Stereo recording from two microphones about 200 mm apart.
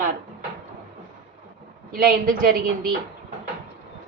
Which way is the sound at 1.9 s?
45° right (ahead or behind).